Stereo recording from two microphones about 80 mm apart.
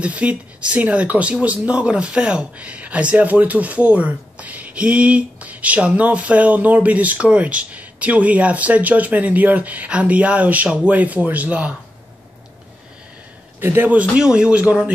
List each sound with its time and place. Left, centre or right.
0.0 s speech: centre
13.6 s speech: right